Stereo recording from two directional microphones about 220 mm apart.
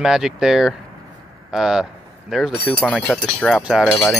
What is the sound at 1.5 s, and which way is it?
Wind chime, centre (ahead or behind).